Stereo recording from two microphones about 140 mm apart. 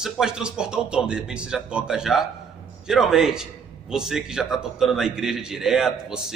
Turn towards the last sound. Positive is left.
turn(degrees=-5)  # may be behind; listen again after turning